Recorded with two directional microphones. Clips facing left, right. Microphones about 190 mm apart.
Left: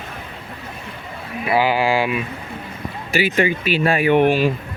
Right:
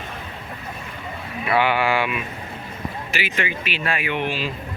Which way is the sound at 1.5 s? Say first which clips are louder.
Left 2 dB; 30° left (ahead or behind).